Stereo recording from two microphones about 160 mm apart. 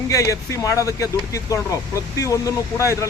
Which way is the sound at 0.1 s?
20° left (ahead or behind).